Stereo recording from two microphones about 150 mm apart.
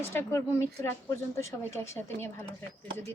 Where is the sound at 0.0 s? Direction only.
15° left (ahead or behind).